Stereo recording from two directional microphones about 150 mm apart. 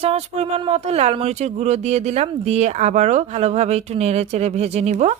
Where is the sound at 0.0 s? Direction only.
40° right (ahead or behind).